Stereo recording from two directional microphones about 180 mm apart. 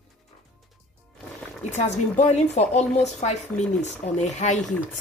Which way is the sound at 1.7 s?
40° left (ahead or behind).